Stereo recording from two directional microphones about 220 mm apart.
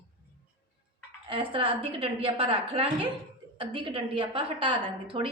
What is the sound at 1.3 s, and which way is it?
A woman's voice, 25° right (ahead or behind).